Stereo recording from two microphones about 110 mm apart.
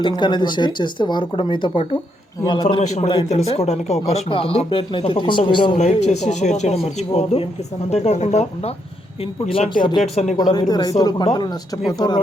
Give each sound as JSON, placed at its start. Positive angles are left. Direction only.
{"t": 0.2, "sound": "speech", "side_deg": 45}
{"t": 2.8, "sound": "speech", "side_deg": 90}
{"t": 3.1, "sound": "speech", "side_deg": 70}
{"t": 5.7, "sound": "speech", "side_deg": 90}
{"t": 9.2, "sound": "speech", "side_deg": 60}
{"t": 10.0, "sound": "speech", "side_deg": 90}
{"t": 10.3, "sound": "speech", "side_deg": 40}